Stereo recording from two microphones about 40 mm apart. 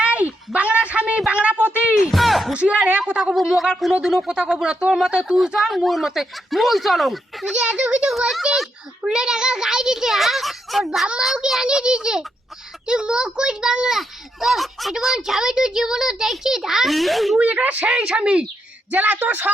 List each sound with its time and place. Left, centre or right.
0.0 s a sound: right
2.0 s a sound: centre
2.5 s a child's voice: right
3.4 s a child's voice: centre
4.3 s a child's voice: centre
5.5 s speech: centre
7.5 s speech: right
9.0 s a child's voice: centre
10.2 s a child's voice: centre
16.8 s speech: centre
17.3 s speech: right
18.0 s a child's voice: right
18.9 s speech: right